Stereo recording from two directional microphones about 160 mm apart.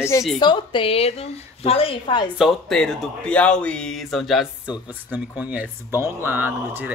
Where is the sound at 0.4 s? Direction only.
30° left (ahead or behind).